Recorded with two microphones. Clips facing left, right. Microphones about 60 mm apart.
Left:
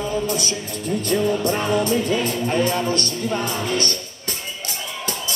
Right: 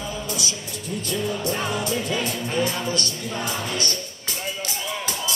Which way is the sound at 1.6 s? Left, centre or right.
Centre.